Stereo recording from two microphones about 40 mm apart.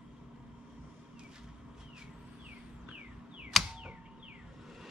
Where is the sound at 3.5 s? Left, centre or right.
Centre.